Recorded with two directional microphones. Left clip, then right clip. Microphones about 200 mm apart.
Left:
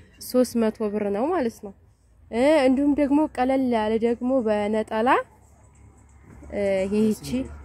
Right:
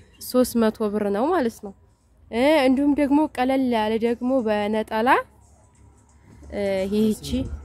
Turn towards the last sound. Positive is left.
turn(degrees=0)  # may be behind; listen again after turning